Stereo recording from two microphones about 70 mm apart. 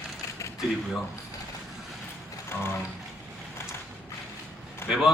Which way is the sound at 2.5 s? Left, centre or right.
Left.